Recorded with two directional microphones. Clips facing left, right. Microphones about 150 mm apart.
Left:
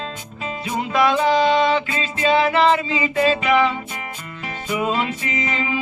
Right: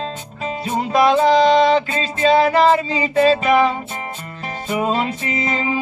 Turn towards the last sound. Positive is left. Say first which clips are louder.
# right 3 dB
turn(degrees=-35)  # may be behind; listen again after turning